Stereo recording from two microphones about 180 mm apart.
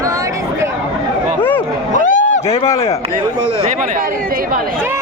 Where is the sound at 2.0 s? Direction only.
45° left (ahead or behind).